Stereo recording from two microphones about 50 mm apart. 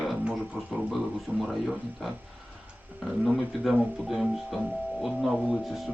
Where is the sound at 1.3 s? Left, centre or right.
Right.